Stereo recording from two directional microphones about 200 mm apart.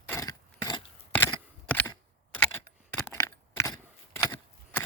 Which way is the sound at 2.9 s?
10° left (ahead or behind).